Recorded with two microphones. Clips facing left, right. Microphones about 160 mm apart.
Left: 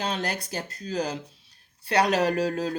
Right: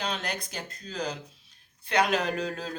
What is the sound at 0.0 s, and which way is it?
Speech, 30° left (ahead or behind).